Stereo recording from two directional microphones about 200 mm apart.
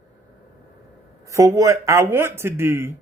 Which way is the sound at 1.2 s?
15° right (ahead or behind).